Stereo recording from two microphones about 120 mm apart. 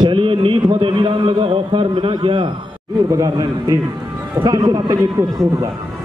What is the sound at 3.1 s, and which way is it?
A man's voice, 30° right (ahead or behind).